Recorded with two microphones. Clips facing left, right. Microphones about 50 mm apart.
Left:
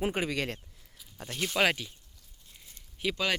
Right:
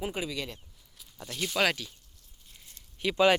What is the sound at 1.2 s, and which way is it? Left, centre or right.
Speech, left.